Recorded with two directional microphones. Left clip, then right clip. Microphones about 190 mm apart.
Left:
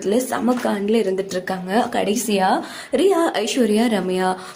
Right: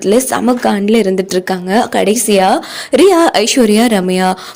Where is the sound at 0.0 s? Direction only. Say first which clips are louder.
Right 8 dB; 50° right (ahead or behind).